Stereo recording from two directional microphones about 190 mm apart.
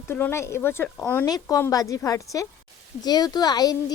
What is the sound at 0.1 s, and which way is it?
Speech, 10° left (ahead or behind).